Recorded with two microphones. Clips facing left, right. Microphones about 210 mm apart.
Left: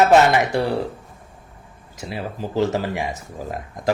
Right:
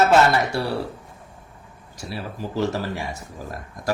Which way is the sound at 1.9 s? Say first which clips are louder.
Left 3 dB; 20° left (ahead or behind).